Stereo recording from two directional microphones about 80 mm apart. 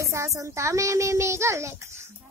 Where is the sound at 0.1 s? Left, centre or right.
Right.